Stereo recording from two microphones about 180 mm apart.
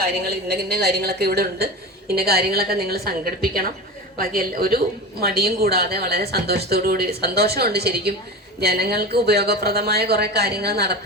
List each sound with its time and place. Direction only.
0.0 s a woman's voice: 60° right (ahead or behind)